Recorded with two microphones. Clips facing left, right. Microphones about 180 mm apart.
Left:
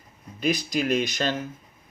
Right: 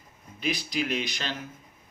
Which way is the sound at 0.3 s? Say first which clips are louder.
Left 5 dB; 45° left (ahead or behind).